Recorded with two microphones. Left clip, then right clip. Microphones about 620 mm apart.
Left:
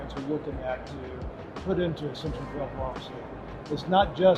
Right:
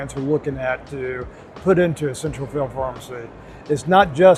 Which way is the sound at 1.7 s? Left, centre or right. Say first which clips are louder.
Right 11 dB; right.